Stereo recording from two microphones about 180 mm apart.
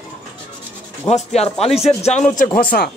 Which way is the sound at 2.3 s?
50° left (ahead or behind).